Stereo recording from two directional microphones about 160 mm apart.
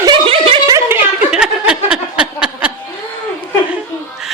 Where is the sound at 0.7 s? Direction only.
15° right (ahead or behind).